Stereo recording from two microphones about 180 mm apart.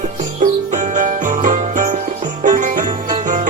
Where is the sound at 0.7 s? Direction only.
45° right (ahead or behind).